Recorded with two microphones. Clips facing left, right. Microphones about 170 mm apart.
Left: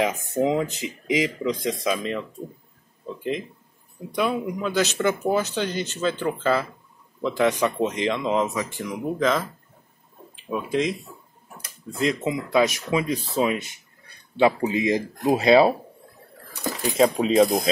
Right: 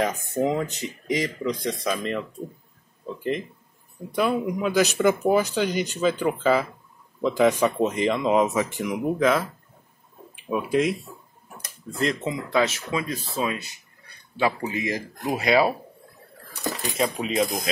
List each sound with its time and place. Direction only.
0.0 s speech: centre (ahead or behind)
4.1 s speech: 5° right (ahead or behind)
10.5 s speech: 5° right (ahead or behind)
11.9 s speech: 5° left (ahead or behind); by 15.7 s 25° left (ahead or behind)
16.9 s speech: 30° left (ahead or behind)